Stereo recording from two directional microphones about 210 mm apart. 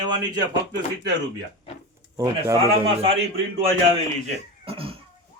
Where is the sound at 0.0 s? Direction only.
20° right (ahead or behind).